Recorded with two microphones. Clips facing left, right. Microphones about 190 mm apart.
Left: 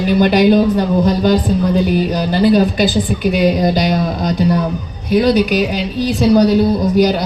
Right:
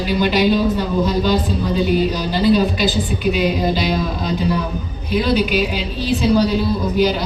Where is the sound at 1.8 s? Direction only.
45° left (ahead or behind).